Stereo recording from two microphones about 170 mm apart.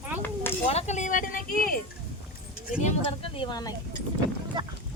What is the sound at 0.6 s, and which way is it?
Speech, 40° left (ahead or behind).